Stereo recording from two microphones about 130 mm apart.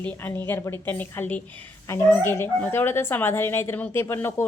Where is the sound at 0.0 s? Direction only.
15° left (ahead or behind).